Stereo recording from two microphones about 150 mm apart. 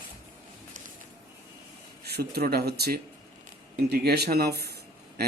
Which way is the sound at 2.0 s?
90° right.